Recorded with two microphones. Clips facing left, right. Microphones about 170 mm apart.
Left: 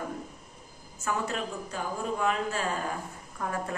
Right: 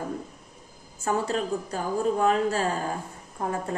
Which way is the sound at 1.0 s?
35° right (ahead or behind).